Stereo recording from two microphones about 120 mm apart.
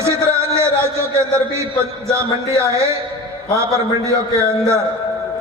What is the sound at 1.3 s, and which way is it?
Speech, 20° right (ahead or behind).